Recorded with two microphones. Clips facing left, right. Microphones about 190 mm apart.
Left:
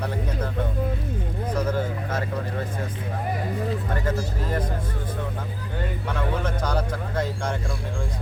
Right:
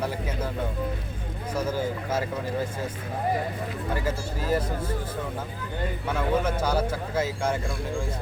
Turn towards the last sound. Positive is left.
turn(degrees=-5)  # may be behind; listen again after turning